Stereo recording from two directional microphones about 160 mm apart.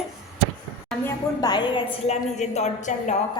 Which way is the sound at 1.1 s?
25° left (ahead or behind).